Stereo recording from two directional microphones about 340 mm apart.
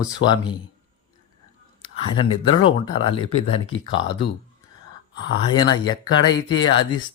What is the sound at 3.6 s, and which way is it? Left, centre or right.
Speech, left.